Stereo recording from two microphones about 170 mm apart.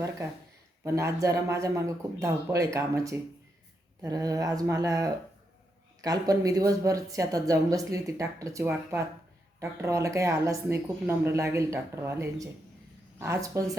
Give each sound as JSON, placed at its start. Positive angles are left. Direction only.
{"t": 0.9, "sound": "a woman's voice", "side_deg": -15}